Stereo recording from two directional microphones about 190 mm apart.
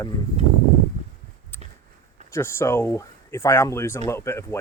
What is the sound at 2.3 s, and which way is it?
Speech, 15° left (ahead or behind).